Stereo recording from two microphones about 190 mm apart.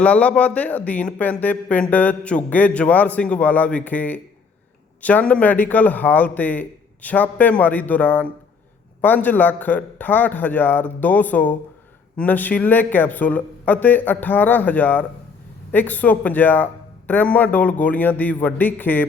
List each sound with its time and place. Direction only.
0.0 s speech: 5° left (ahead or behind)